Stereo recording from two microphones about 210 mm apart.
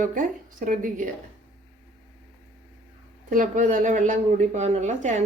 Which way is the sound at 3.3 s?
40° right (ahead or behind).